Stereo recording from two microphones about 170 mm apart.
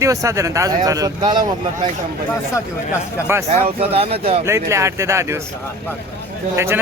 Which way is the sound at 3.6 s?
35° right (ahead or behind).